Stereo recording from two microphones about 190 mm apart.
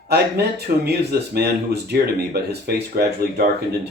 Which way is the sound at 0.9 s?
55° right (ahead or behind).